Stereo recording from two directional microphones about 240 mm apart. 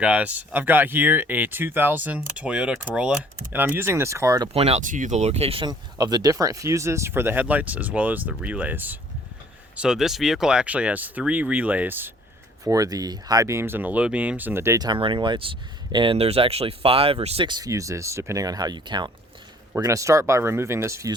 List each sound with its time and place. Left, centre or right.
0.0 s speech: centre
4.5 s speech: right